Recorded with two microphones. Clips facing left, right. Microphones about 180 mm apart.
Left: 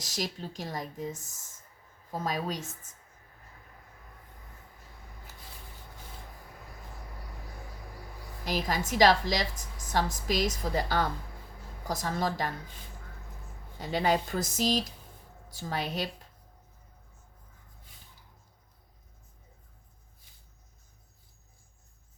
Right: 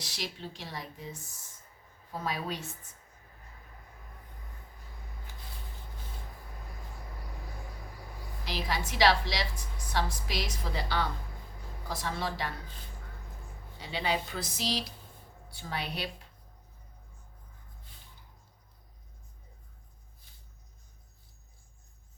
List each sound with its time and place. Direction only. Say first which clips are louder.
0.0 s a woman's voice: left 4 dB; 45° left (ahead or behind)
8.4 s a woman's voice: left 4 dB; 45° left (ahead or behind)
13.7 s a woman's voice: left 5 dB; 45° left (ahead or behind)